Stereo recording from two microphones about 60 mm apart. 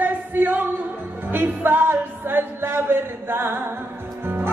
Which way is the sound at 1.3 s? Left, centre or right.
Right.